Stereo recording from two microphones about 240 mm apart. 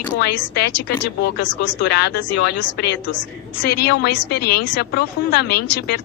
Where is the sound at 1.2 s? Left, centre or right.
Left.